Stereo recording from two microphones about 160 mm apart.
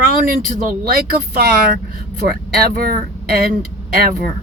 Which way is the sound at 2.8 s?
65° right (ahead or behind).